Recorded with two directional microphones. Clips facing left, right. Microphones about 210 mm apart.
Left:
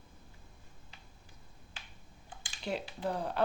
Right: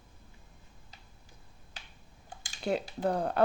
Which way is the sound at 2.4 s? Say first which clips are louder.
Right 6 dB; 45° right (ahead or behind).